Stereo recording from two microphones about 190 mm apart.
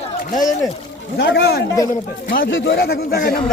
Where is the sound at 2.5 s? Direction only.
70° left (ahead or behind); by 3.4 s 50° left (ahead or behind).